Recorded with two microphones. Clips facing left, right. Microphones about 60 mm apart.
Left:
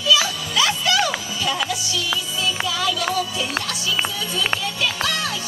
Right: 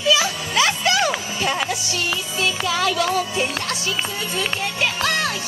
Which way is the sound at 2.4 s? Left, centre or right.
Right.